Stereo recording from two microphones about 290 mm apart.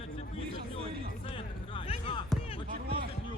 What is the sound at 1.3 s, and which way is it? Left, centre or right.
Music, centre.